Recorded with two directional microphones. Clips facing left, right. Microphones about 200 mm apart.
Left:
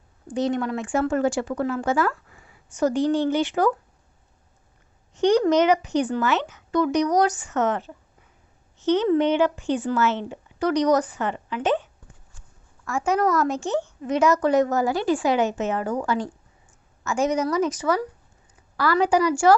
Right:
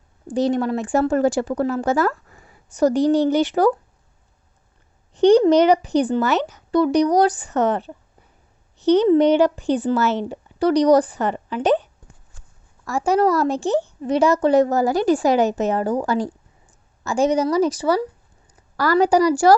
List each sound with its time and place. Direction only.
0.3 s speech: 35° right (ahead or behind)
5.1 s speech: 30° right (ahead or behind)